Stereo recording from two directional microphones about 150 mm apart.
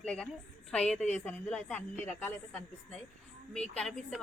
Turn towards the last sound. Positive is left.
turn(degrees=5)  # may be behind; listen again after turning